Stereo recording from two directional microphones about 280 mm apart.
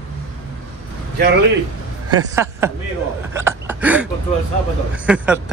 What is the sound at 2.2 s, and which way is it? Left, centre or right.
Speech, centre.